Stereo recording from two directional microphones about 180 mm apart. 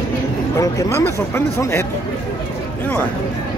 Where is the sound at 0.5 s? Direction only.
15° left (ahead or behind).